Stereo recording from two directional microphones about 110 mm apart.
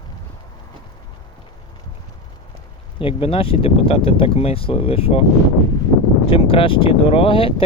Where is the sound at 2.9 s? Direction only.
55° left (ahead or behind).